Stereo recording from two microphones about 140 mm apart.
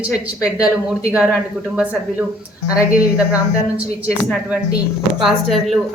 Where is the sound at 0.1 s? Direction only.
25° left (ahead or behind).